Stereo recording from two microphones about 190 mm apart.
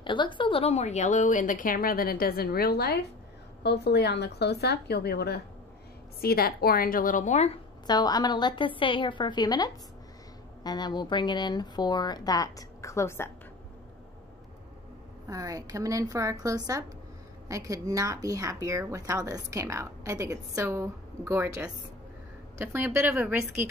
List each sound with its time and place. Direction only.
0.0 s a woman's voice: 25° left (ahead or behind)
7.8 s speech: 20° left (ahead or behind)
15.2 s a woman's voice: 20° right (ahead or behind)